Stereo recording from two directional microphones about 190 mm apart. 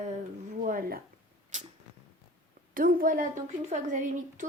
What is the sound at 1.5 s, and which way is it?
Cat, 40° right (ahead or behind).